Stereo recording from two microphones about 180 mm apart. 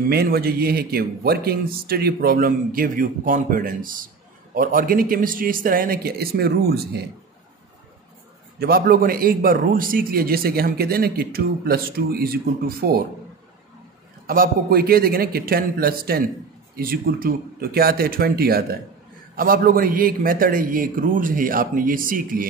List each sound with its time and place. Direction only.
0.1 s a man's voice: 60° right (ahead or behind)
8.5 s a man's voice: 60° right (ahead or behind)
14.2 s a man's voice: 55° right (ahead or behind)